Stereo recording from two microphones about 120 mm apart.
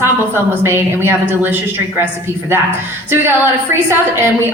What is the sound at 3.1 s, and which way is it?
Speech, 20° right (ahead or behind).